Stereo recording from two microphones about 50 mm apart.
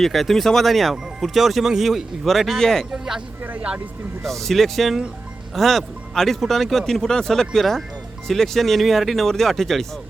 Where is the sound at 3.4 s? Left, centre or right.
Right.